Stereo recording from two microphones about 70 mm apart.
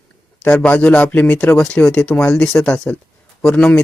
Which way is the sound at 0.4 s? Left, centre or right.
Left.